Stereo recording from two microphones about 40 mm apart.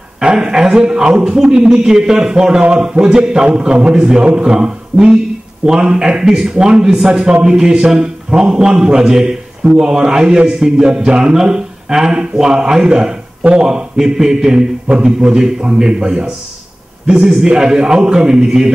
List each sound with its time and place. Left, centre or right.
0.2 s a man's voice: right
4.5 s a man's voice: centre